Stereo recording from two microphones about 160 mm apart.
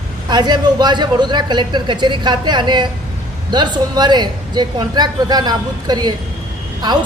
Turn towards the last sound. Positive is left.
turn(degrees=-25)  # may be behind; listen again after turning